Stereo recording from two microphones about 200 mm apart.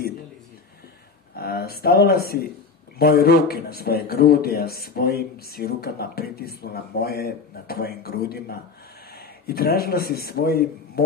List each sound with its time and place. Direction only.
1.3 s a man's voice: 50° left (ahead or behind)
9.1 s a man's voice: 50° left (ahead or behind)